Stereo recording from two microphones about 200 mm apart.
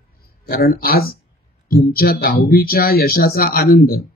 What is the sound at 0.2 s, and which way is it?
A man's voice, 50° left (ahead or behind).